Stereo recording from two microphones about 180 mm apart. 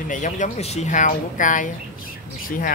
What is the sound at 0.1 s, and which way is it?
Speech, 45° left (ahead or behind).